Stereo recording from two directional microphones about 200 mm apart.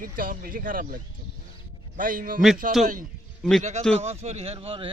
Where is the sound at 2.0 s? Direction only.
45° right (ahead or behind).